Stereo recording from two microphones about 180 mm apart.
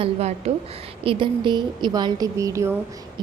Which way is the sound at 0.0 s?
35° right (ahead or behind).